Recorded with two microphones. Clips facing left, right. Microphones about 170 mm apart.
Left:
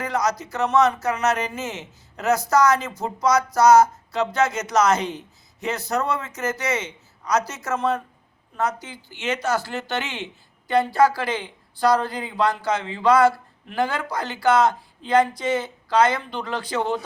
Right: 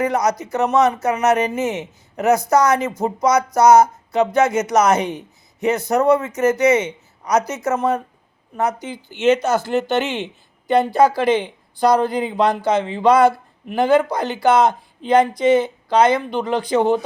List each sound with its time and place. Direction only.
0.0 s speech: 20° right (ahead or behind)